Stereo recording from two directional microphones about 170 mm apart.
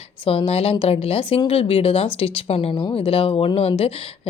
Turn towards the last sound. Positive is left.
turn(degrees=35)  # may be behind; listen again after turning